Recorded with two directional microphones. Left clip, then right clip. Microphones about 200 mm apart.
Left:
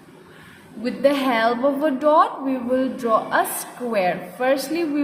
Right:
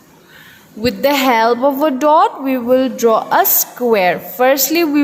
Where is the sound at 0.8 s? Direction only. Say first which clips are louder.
Right 6 dB; 45° right (ahead or behind).